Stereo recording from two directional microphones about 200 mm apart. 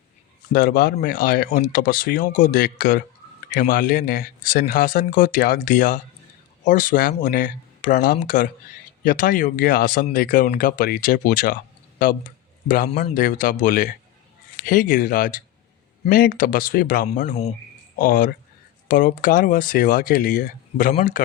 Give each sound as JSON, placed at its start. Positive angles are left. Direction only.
{"t": 0.5, "sound": "speech", "side_deg": 50}
{"t": 12.6, "sound": "speech", "side_deg": 45}